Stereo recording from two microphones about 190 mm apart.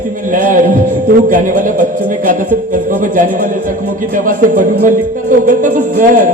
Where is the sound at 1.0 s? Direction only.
45° right (ahead or behind).